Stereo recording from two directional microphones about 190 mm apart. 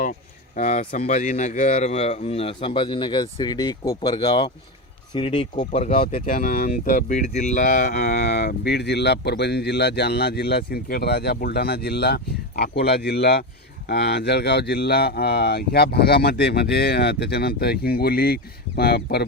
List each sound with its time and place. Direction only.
0.0 s speech: 40° left (ahead or behind)
5.5 s speech: 40° left (ahead or behind); by 19.2 s 55° left (ahead or behind)